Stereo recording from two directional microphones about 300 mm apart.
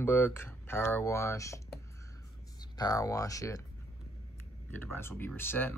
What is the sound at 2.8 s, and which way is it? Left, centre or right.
Speech, centre.